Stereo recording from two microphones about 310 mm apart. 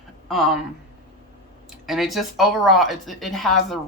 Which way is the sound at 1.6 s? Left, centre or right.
Centre.